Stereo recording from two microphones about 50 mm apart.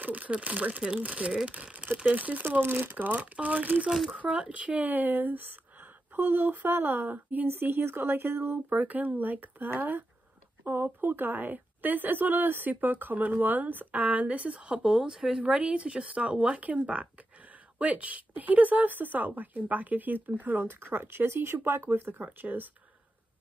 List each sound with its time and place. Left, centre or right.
0.0 s a woman's voice: right
2.6 s speech: right
3.2 s a woman's voice: right
3.9 s speech: centre
4.3 s a woman's voice: right
7.4 s speech: right
8.7 s a woman's voice: right; by 15.4 s centre
15.4 s a woman's voice: right
22.2 s a woman's voice: right